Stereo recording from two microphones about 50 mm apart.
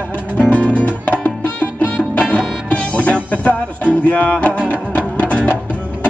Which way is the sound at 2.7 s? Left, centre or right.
Left.